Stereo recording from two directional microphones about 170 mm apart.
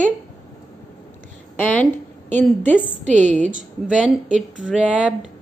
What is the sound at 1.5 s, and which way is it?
Speech, 10° left (ahead or behind).